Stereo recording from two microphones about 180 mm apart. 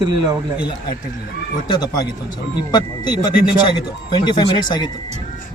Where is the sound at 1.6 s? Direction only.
25° left (ahead or behind).